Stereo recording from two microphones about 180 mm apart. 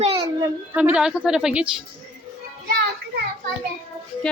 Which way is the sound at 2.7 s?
60° right (ahead or behind).